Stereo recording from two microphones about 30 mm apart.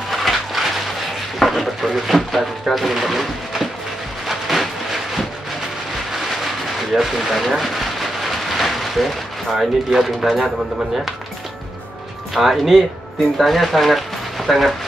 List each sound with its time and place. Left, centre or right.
0.1 s a sound: centre
6.8 s rain: centre
10.0 s speech: centre
12.4 s speech: centre